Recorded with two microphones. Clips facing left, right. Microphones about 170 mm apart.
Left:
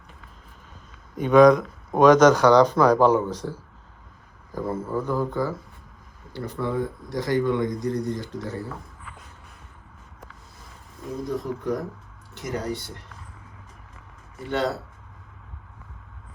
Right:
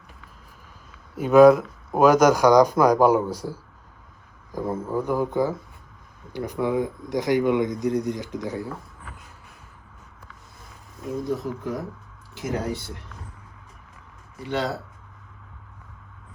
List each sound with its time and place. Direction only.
1.1 s speech: 5° right (ahead or behind)
11.3 s speech: centre (ahead or behind)
14.3 s speech: centre (ahead or behind)